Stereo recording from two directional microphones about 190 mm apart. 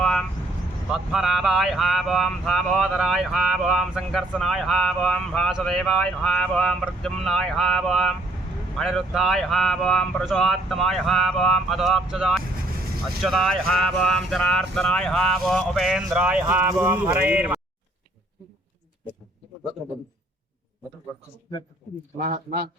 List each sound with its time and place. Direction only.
0.0 s vehicle: centre (ahead or behind)
0.9 s speech: centre (ahead or behind)
22.2 s a man's voice: 45° right (ahead or behind)